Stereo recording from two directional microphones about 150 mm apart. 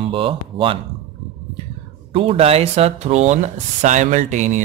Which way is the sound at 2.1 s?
40° right (ahead or behind).